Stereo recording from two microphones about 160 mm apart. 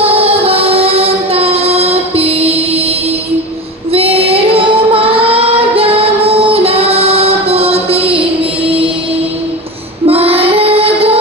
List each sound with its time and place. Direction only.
0.0 s music: 35° right (ahead or behind)
3.9 s child singing: 40° right (ahead or behind)
10.0 s child singing: 35° right (ahead or behind)